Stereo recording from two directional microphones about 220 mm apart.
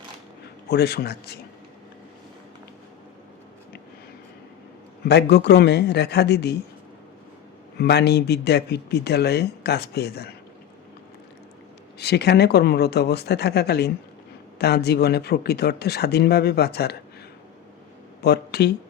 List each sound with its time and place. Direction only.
0.7 s speech: 45° left (ahead or behind)
5.0 s speech: 50° left (ahead or behind)
7.8 s speech: 50° left (ahead or behind)
11.9 s speech: 50° left (ahead or behind)
18.2 s speech: 50° left (ahead or behind)